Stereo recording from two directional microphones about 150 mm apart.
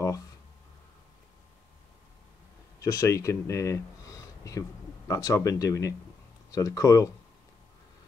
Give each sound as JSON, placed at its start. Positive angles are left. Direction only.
{"t": 2.8, "sound": "speech", "side_deg": 20}